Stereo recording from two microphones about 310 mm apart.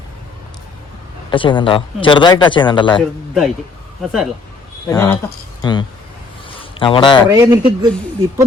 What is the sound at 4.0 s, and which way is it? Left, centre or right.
Speech, centre.